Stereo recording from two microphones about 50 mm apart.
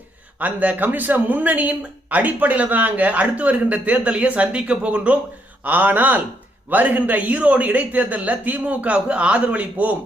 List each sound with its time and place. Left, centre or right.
0.3 s speech: right
5.6 s a man's voice: right